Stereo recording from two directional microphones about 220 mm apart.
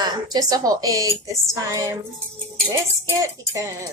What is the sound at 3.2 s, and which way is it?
Speech, 15° right (ahead or behind).